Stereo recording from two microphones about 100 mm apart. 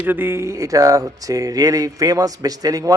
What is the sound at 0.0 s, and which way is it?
Speech, 20° right (ahead or behind).